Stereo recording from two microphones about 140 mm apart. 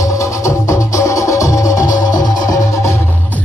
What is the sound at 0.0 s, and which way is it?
Music, 20° left (ahead or behind).